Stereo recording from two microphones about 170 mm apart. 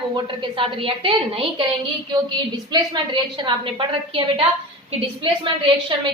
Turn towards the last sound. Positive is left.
turn(degrees=-30)  # may be behind; listen again after turning